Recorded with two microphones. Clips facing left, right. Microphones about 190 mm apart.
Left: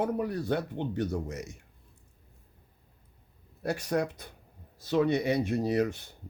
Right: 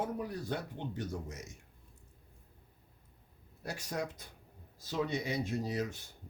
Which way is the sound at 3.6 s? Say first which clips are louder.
Left 9 dB; 65° left (ahead or behind).